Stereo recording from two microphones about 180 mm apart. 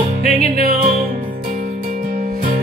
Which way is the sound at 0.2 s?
55° right (ahead or behind).